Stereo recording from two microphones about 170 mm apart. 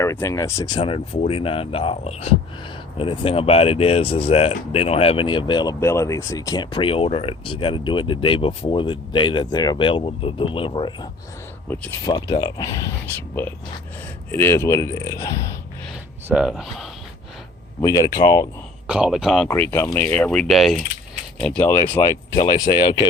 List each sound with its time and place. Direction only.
0.0 s speech: 15° left (ahead or behind)
11.7 s speech: 10° left (ahead or behind)
12.0 s speech: 25° left (ahead or behind)
14.3 s speech: 15° left (ahead or behind)
16.3 s speech: 5° right (ahead or behind)
17.8 s speech: 20° left (ahead or behind)
18.9 s speech: 5° right (ahead or behind)
19.5 s speech: 15° left (ahead or behind)